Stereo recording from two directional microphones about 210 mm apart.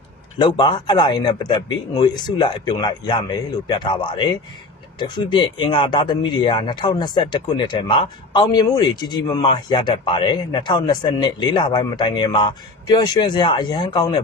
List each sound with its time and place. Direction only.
0.4 s speech: 20° left (ahead or behind)